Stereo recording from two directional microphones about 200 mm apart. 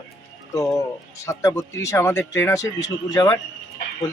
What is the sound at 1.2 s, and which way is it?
Speech, 15° left (ahead or behind).